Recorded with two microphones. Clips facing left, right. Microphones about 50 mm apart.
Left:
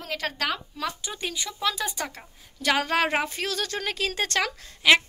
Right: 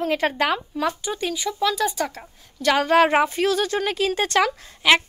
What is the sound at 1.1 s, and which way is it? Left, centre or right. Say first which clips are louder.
A woman's voice: right 8 dB; centre.